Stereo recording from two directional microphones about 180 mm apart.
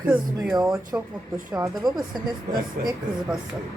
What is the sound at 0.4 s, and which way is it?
Speech, centre (ahead or behind).